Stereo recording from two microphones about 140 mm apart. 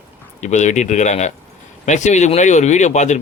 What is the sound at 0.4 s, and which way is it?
Speech, 55° left (ahead or behind).